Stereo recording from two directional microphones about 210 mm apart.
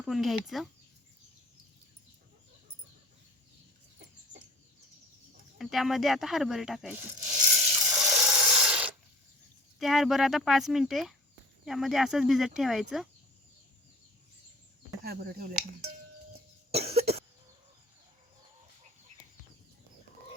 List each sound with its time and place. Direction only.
0.0 s speech: centre (ahead or behind)
5.5 s speech: centre (ahead or behind)
8.0 s rub: 5° right (ahead or behind)
9.7 s speech: centre (ahead or behind)
15.0 s speech: 45° right (ahead or behind)
16.7 s cough: 30° right (ahead or behind)